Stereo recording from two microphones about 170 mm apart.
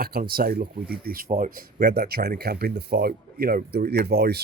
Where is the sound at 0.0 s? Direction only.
60° right (ahead or behind).